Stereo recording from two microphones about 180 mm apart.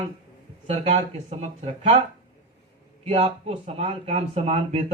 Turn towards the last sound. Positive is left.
turn(degrees=-35)  # may be behind; listen again after turning